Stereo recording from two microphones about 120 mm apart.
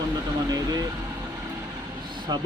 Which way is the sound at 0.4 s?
35° right (ahead or behind).